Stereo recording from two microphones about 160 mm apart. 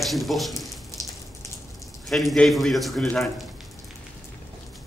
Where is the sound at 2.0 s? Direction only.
Centre (ahead or behind).